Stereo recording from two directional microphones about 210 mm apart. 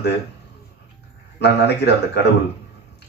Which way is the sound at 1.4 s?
55° left (ahead or behind).